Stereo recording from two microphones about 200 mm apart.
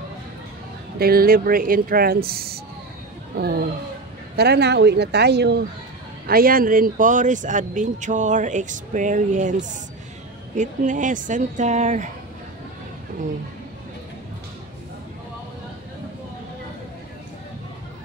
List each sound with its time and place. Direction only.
0.9 s speech: 50° right (ahead or behind)